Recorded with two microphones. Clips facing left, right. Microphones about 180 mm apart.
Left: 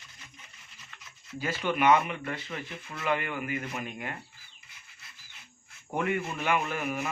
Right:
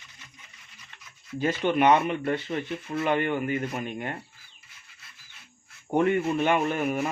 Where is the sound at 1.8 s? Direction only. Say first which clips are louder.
Right 2 dB; 35° right (ahead or behind).